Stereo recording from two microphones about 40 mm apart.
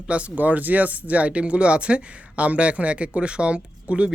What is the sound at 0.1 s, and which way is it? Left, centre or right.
Speech, right.